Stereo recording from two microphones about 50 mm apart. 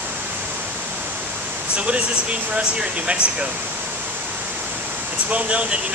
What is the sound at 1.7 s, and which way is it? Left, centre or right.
Speech, right.